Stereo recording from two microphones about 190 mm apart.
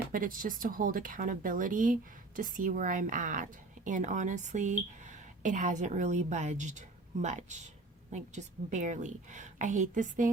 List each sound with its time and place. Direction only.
0.1 s a woman's voice: 45° right (ahead or behind)